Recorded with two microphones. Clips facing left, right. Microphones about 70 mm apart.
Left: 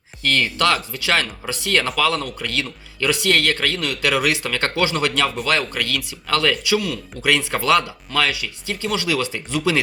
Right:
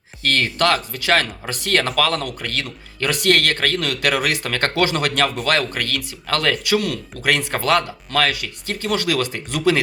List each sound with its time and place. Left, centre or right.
0.3 s speech: right
7.2 s speech: right